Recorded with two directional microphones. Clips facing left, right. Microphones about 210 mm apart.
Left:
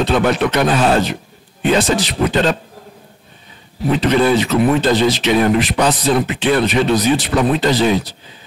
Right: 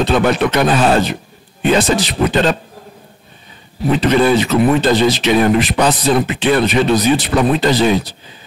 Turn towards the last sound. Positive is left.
turn(degrees=-10)  # may be behind; listen again after turning